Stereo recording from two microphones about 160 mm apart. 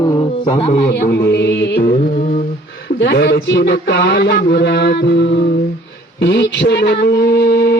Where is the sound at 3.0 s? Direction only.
90° left.